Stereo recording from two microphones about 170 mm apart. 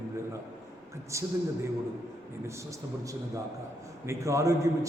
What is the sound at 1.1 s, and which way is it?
Speech, 15° right (ahead or behind).